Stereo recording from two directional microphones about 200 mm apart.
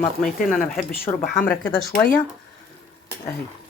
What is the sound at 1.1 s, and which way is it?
Speech, 20° left (ahead or behind).